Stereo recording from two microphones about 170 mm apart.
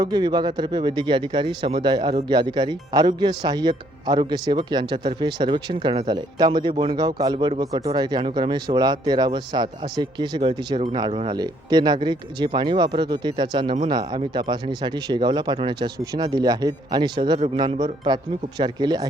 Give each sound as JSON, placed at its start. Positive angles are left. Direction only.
{"t": 0.0, "sound": "speech", "side_deg": -25}